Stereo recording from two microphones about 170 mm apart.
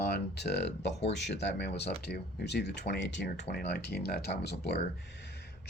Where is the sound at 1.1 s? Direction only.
90° left.